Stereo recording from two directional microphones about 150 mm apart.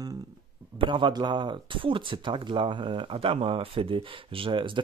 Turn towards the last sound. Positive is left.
turn(degrees=-35)  # may be behind; listen again after turning